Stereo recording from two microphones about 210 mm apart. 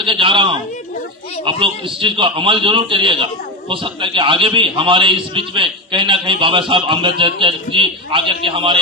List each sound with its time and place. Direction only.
0.0 s a man's voice: 25° right (ahead or behind)